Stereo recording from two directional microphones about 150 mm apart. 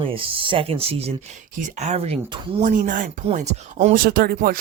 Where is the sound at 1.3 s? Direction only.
60° right (ahead or behind).